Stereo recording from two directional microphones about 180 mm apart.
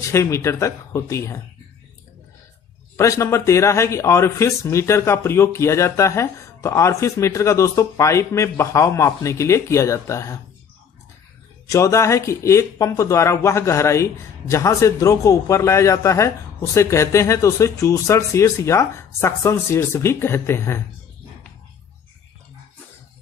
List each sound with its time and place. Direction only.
0.1 s speech: 15° left (ahead or behind)
3.0 s speech: 15° left (ahead or behind)
11.7 s speech: 15° left (ahead or behind)